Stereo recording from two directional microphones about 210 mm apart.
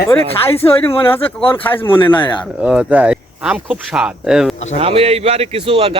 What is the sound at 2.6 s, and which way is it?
Speech, 5° right (ahead or behind).